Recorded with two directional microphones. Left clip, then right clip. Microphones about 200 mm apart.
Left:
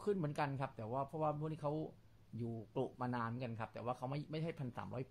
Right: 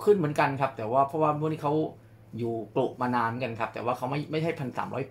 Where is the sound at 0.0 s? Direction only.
50° left (ahead or behind).